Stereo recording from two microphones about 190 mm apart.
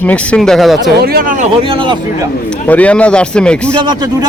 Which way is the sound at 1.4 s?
30° right (ahead or behind).